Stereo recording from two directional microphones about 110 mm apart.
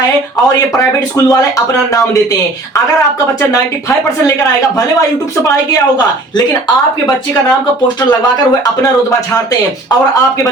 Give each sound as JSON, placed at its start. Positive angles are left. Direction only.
{"t": 0.4, "sound": "speech", "side_deg": 30}
{"t": 3.5, "sound": "speech", "side_deg": 25}